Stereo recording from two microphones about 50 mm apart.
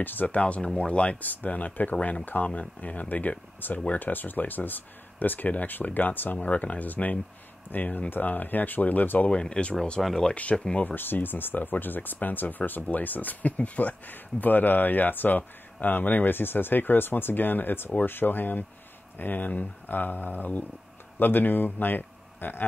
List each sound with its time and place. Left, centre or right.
0.0 s speech: left
0.4 s speech: left
1.2 s speech: left
9.3 s speech: centre
10.0 s speech: centre
10.3 s speech: left
11.0 s speech: left